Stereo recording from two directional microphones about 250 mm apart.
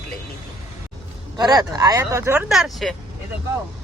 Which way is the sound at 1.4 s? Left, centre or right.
Centre.